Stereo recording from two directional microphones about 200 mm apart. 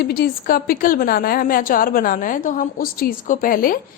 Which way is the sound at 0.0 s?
50° left (ahead or behind).